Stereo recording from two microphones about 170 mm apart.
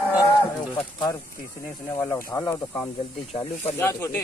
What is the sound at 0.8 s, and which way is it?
Speech, 25° left (ahead or behind).